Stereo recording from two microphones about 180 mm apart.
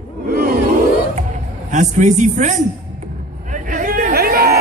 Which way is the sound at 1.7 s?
40° right (ahead or behind).